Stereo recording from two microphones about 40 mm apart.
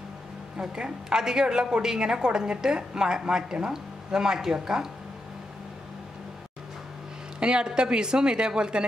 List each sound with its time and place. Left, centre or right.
0.6 s a woman's voice: centre
7.3 s a woman's voice: right